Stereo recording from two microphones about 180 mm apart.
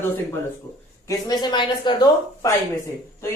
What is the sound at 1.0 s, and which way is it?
Speech, 25° left (ahead or behind).